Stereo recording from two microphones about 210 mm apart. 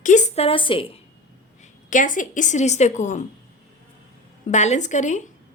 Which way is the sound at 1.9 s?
40° left (ahead or behind).